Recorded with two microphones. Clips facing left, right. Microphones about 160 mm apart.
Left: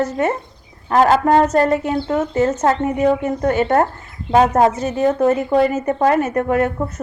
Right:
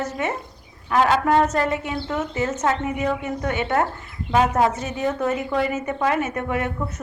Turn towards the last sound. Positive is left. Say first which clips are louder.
# left 7 dB
turn(degrees=40)  # may be behind; listen again after turning